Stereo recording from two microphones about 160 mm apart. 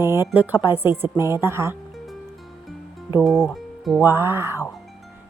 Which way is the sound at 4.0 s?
15° right (ahead or behind).